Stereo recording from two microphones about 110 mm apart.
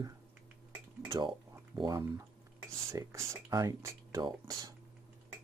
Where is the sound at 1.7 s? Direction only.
35° right (ahead or behind).